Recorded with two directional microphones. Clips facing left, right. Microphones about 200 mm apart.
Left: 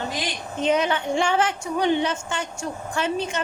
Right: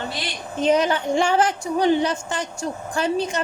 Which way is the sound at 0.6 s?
35° right (ahead or behind).